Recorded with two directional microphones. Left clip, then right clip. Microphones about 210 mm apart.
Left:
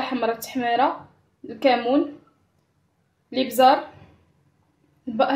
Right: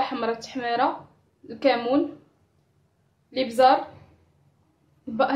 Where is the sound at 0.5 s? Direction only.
25° left (ahead or behind).